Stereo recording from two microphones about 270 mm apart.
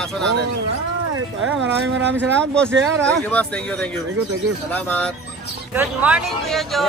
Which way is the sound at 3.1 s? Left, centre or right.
Centre.